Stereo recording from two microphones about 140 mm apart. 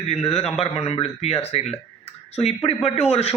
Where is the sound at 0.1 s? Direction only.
45° left (ahead or behind).